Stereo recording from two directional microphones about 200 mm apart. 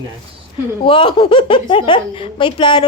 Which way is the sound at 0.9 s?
25° left (ahead or behind).